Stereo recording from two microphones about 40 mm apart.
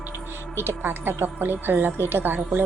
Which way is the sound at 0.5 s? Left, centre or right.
Right.